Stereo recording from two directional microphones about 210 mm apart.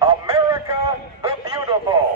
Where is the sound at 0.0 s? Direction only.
25° right (ahead or behind).